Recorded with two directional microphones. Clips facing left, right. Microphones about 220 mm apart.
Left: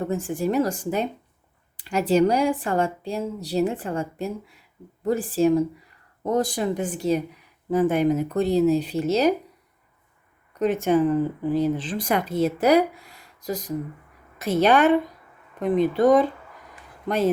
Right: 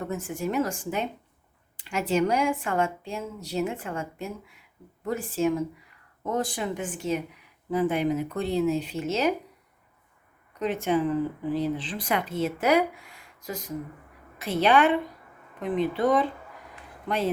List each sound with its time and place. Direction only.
0.0 s speech: 30° left (ahead or behind)
10.6 s a woman's voice: 45° left (ahead or behind)